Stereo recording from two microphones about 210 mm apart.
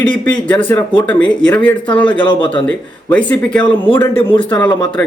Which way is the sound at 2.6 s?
5° left (ahead or behind).